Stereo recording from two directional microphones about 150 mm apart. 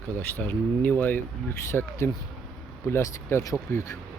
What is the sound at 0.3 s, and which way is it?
Speech, 10° left (ahead or behind).